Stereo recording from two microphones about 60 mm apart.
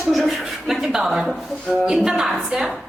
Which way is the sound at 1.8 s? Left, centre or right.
Centre.